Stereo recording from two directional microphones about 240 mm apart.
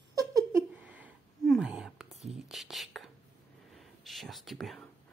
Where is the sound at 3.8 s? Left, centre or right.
Centre.